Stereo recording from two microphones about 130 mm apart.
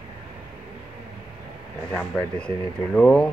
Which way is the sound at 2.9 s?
5° left (ahead or behind).